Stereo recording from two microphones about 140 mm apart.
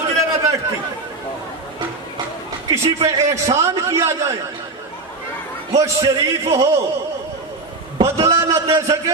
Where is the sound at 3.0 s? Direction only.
20° right (ahead or behind).